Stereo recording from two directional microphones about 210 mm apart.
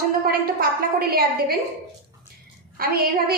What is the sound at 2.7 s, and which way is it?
Speech, 45° right (ahead or behind).